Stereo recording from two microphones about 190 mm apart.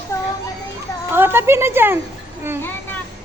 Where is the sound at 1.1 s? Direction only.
10° right (ahead or behind).